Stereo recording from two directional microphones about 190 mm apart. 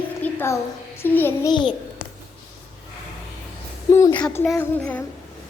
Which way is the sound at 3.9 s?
10° left (ahead or behind).